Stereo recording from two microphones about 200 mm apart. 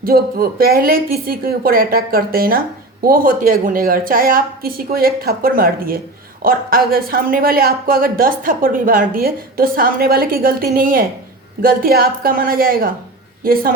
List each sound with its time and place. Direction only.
0.0 s speech: 50° right (ahead or behind)